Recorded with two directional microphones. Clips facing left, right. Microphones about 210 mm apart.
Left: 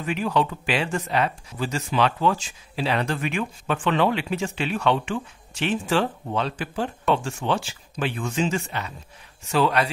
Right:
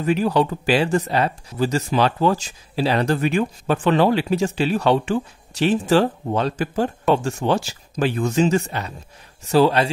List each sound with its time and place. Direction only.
0.0 s speech: 40° right (ahead or behind)